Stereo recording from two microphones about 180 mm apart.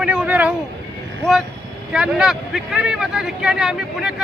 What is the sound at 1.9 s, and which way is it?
A man's voice, 5° right (ahead or behind).